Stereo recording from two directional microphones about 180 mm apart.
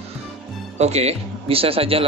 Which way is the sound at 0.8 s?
35° right (ahead or behind).